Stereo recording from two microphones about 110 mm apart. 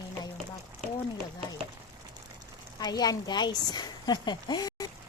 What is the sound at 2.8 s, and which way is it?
Speech, 35° left (ahead or behind).